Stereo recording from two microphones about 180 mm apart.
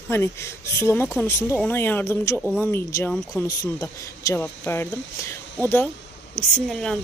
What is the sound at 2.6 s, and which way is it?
A woman's voice, 15° left (ahead or behind).